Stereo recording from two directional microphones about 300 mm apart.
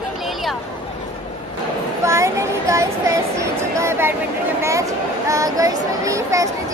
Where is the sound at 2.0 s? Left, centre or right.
Centre.